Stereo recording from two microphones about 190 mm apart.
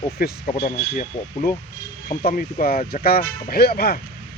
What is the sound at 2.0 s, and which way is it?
Speech, 45° left (ahead or behind).